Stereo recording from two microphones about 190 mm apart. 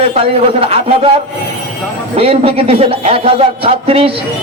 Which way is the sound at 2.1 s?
30° right (ahead or behind).